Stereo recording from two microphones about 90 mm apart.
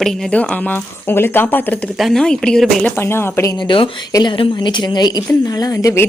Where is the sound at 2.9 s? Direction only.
25° left (ahead or behind).